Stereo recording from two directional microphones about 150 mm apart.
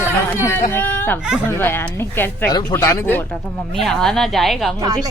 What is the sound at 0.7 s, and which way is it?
Speech, 15° left (ahead or behind).